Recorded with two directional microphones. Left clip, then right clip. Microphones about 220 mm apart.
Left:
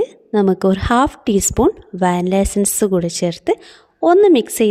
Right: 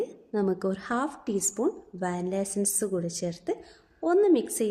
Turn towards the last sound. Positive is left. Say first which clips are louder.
# left 11 dB
turn(degrees=40)  # may be behind; listen again after turning